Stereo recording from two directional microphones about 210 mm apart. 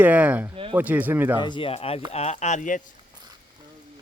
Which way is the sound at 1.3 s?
20° left (ahead or behind).